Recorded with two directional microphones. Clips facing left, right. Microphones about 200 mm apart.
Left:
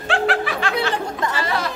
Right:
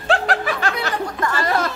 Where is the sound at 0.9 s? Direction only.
25° left (ahead or behind).